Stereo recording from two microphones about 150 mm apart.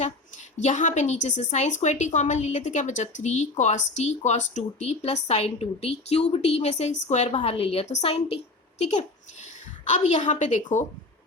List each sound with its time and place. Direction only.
0.6 s a woman's voice: 55° left (ahead or behind)
9.8 s a woman's voice: 50° left (ahead or behind)